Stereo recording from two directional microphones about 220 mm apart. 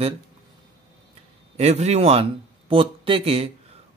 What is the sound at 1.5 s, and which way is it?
Speech, 30° right (ahead or behind).